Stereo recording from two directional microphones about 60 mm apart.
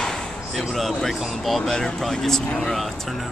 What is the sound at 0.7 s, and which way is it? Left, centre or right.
Speech, centre.